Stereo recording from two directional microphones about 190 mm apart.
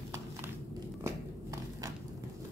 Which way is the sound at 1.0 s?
15° right (ahead or behind).